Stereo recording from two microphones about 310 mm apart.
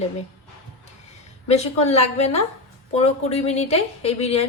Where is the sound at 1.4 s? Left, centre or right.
Left.